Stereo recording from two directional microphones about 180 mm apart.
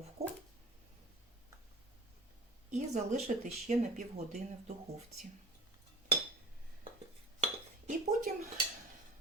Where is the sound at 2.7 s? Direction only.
40° right (ahead or behind).